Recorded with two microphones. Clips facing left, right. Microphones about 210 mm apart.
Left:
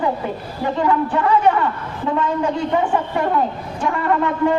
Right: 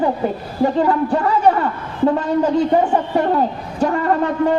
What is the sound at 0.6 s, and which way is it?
A man's voice, 40° right (ahead or behind).